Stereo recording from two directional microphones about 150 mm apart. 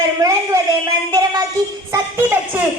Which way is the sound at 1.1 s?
25° right (ahead or behind).